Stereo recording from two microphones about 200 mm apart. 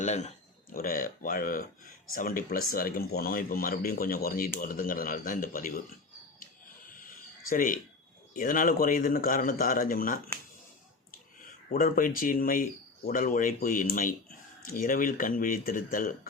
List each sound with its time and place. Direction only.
0.0 s speech: 35° left (ahead or behind)
7.5 s speech: 45° left (ahead or behind)
11.7 s speech: 45° left (ahead or behind)